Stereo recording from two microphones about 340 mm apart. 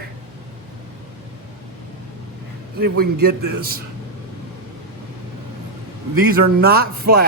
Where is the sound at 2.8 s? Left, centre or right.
Right.